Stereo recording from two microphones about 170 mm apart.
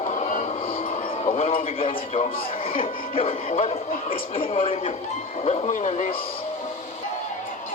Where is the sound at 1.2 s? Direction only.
35° left (ahead or behind).